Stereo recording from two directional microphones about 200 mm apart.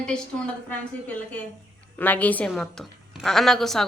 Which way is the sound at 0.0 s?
5° left (ahead or behind).